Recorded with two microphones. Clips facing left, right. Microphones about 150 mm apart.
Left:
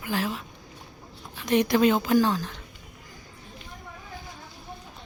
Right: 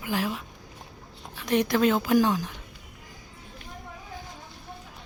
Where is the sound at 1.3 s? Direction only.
Centre (ahead or behind).